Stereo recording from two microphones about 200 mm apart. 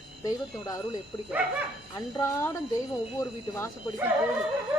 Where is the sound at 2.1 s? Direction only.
15° left (ahead or behind).